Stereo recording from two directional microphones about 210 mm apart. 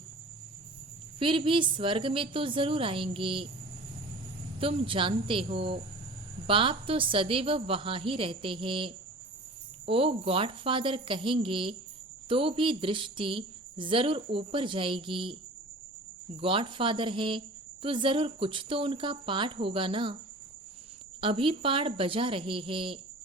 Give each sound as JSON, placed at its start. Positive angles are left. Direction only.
{"t": 1.2, "sound": "a woman's voice", "side_deg": -25}
{"t": 4.6, "sound": "a woman's voice", "side_deg": -25}
{"t": 16.4, "sound": "a woman's voice", "side_deg": -25}
{"t": 21.2, "sound": "a woman's voice", "side_deg": -25}